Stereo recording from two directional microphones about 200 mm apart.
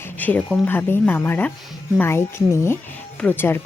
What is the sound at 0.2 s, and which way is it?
Speech, 10° left (ahead or behind).